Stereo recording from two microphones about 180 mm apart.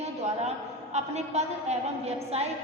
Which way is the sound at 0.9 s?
40° right (ahead or behind).